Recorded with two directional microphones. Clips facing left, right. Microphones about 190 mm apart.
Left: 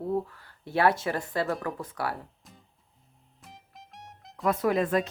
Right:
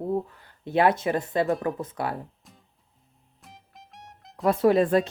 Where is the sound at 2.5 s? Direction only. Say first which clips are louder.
Even; centre (ahead or behind).